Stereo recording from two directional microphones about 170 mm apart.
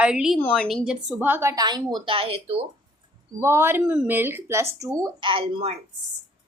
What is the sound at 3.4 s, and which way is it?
A woman's voice, 15° right (ahead or behind).